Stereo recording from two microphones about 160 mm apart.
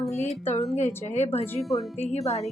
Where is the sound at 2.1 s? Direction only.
40° left (ahead or behind).